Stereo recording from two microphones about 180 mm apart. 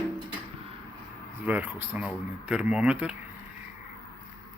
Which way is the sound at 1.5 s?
10° right (ahead or behind).